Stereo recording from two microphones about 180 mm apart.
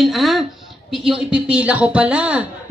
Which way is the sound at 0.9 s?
Centre (ahead or behind).